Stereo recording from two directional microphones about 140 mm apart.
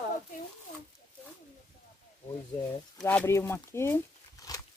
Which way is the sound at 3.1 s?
15° left (ahead or behind).